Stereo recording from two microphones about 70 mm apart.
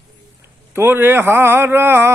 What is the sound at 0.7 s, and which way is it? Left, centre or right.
Mantra, right.